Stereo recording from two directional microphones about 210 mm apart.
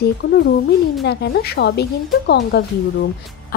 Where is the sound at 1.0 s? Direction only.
50° left (ahead or behind).